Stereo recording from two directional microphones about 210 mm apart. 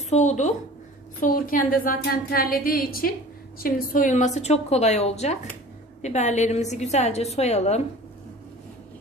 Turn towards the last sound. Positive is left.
turn(degrees=30)  # may be behind; listen again after turning